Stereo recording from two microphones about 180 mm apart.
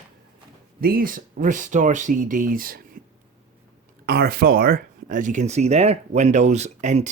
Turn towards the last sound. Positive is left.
turn(degrees=-40)  # may be behind; listen again after turning